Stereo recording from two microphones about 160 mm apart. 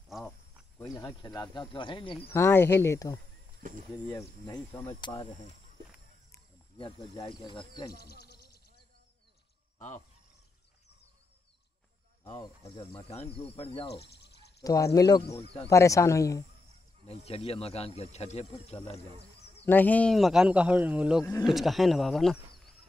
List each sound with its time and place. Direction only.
0.1 s cricket: centre (ahead or behind)
0.7 s speech: 20° left (ahead or behind)
2.2 s speech: 15° left (ahead or behind)
3.6 s speech: 55° right (ahead or behind)
4.1 s speech: 20° left (ahead or behind)
6.8 s speech: 25° left (ahead or behind)
7.9 s speech: 80° left
9.8 s speech: 50° left (ahead or behind)
12.4 s speech: 30° left (ahead or behind)
14.0 s speech: 90° left
14.6 s speech: 20° left (ahead or behind)
17.1 s speech: 40° left (ahead or behind)
19.6 s speech: 10° left (ahead or behind)